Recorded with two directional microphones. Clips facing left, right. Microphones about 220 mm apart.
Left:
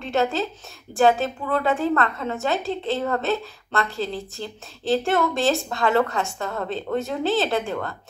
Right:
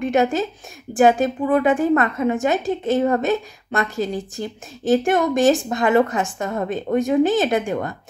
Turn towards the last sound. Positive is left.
turn(degrees=-15)  # may be behind; listen again after turning